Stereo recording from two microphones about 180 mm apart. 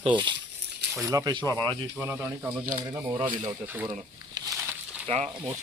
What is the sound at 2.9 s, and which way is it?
Speech, 25° right (ahead or behind).